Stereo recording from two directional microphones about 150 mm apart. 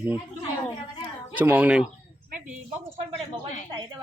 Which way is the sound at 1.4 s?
10° right (ahead or behind).